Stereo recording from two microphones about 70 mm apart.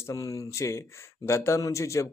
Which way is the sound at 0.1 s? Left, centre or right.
Left.